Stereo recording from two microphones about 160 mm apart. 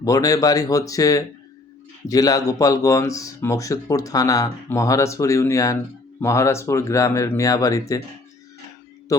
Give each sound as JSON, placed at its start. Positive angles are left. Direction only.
{"t": 0.0, "sound": "speech", "side_deg": 20}